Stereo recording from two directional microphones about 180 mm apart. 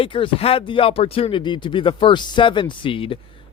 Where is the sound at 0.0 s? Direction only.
30° left (ahead or behind).